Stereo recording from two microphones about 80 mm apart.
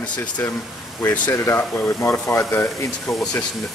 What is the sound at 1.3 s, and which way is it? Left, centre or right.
Speech, left.